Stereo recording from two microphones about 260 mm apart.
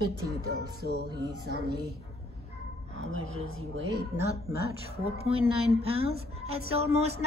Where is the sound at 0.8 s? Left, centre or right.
Right.